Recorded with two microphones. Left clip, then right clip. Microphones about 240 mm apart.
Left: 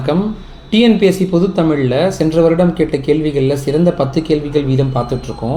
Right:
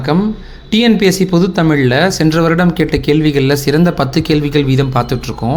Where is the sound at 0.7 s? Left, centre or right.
Right.